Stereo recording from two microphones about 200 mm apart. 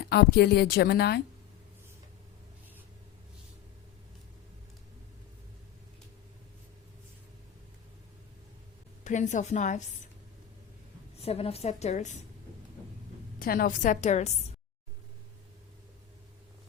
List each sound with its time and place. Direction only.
0.1 s a woman's voice: 55° left (ahead or behind)
9.0 s a woman's voice: 35° left (ahead or behind)
11.2 s a woman's voice: 30° left (ahead or behind)
13.4 s a woman's voice: 45° left (ahead or behind)